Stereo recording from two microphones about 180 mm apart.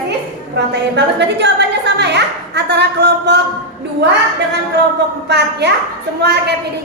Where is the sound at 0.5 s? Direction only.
70° right (ahead or behind).